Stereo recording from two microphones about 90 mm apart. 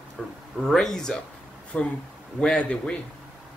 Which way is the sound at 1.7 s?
20° left (ahead or behind).